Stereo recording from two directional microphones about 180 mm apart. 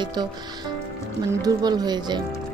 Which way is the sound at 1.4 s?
20° right (ahead or behind).